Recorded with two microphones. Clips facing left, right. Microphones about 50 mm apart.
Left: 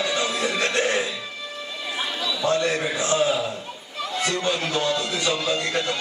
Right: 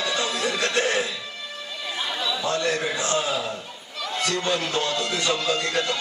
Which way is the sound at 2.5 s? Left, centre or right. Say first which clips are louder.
Left 3 dB; left.